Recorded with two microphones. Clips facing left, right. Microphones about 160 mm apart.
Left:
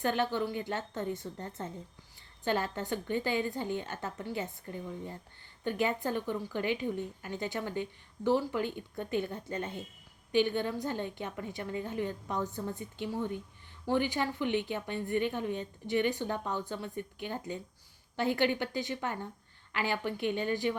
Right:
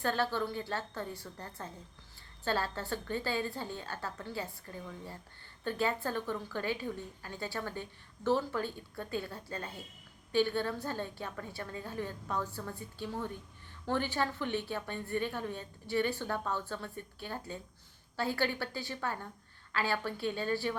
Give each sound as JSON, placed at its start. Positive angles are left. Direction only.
{"t": 0.0, "sound": "a woman's voice", "side_deg": 20}